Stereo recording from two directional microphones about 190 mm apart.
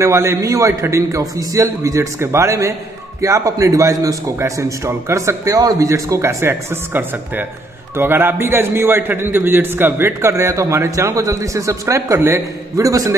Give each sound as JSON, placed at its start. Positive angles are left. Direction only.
{"t": 0.0, "sound": "a man's voice", "side_deg": -15}